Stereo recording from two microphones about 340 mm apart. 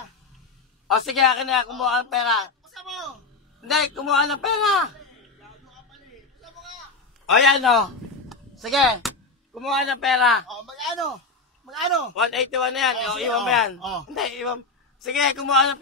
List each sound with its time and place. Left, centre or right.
0.8 s a man's voice: centre
6.4 s a sound: centre
7.2 s a man's voice: centre